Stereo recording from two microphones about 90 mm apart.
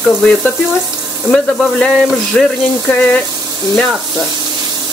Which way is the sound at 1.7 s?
5° left (ahead or behind).